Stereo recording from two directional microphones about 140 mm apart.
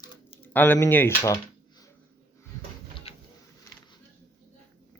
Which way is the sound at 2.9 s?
45° left (ahead or behind).